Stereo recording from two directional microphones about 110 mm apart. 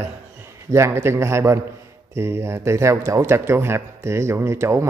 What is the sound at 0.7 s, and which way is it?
Speech, 25° right (ahead or behind).